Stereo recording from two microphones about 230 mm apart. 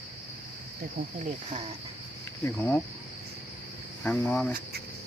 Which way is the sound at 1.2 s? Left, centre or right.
Right.